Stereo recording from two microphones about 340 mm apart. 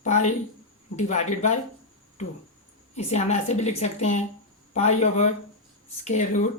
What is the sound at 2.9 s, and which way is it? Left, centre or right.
Speech, centre.